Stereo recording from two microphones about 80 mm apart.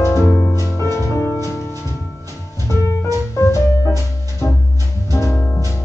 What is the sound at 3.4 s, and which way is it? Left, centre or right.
Music, left.